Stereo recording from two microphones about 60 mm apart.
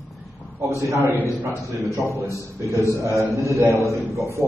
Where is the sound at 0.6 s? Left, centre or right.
Right.